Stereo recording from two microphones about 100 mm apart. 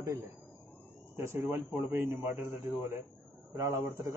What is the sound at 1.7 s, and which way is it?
A man's voice, 25° right (ahead or behind).